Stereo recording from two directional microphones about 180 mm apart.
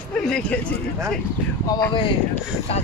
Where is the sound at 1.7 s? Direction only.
20° left (ahead or behind).